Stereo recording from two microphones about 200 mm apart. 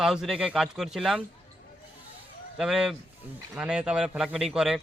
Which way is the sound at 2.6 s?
Centre (ahead or behind).